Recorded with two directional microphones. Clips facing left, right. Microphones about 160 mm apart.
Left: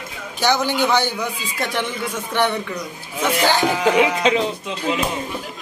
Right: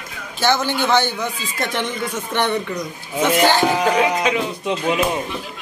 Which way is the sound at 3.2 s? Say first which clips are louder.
Right 3 dB; 15° right (ahead or behind).